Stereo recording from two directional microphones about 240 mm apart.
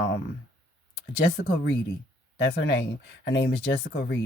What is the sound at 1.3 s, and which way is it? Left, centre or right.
Speech, left.